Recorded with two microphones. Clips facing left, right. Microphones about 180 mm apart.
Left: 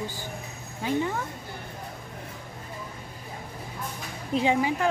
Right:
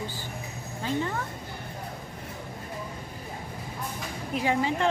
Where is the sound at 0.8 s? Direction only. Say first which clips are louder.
Left 3 dB; 15° left (ahead or behind).